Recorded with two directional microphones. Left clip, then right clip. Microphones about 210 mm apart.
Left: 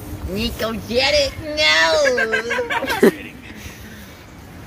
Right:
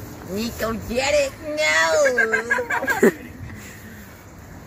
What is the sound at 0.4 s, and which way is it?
Speech, 10° left (ahead or behind).